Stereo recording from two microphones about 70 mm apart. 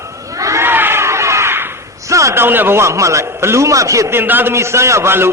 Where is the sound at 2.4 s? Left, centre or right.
Right.